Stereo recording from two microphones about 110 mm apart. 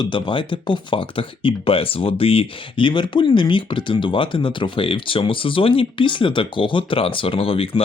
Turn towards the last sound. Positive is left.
turn(degrees=55)  # may be behind; listen again after turning